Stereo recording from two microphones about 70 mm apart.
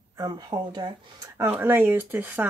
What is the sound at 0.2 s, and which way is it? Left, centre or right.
Speech, right.